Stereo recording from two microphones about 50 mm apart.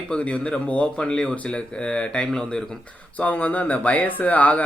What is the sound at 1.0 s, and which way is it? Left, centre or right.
Speech, centre.